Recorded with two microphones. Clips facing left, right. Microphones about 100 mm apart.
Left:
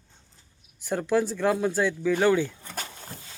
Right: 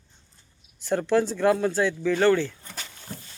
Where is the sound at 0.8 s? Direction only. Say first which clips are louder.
Right 2 dB; 5° left (ahead or behind).